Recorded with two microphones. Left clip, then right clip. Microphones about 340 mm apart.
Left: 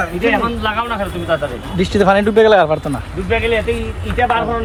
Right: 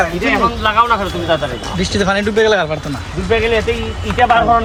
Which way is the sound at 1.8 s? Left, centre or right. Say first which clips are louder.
Left 4 dB; centre.